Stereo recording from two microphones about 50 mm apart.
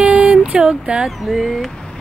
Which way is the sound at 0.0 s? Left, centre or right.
Centre.